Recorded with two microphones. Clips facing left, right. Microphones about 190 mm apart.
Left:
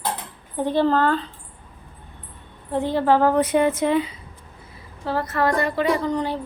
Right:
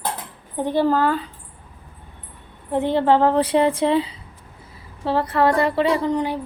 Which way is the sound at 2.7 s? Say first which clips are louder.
Right 2 dB; 20° right (ahead or behind).